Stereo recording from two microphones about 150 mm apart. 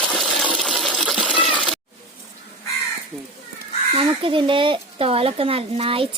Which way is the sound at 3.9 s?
35° right (ahead or behind).